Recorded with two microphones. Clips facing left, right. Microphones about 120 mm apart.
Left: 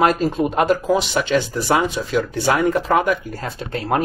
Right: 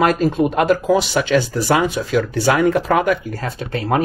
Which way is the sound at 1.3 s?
60° right (ahead or behind).